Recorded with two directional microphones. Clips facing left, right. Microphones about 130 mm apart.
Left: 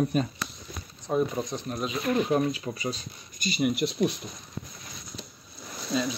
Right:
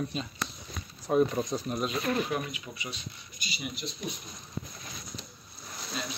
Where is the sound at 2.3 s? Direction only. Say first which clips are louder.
Left 8 dB; 35° left (ahead or behind); by 4.1 s 65° left (ahead or behind).